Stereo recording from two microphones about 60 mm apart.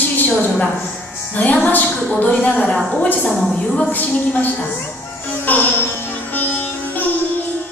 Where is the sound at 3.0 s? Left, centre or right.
Left.